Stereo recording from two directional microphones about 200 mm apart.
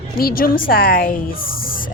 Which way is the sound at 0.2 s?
50° left (ahead or behind).